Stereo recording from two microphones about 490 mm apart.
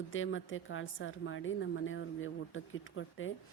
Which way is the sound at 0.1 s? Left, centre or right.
Left.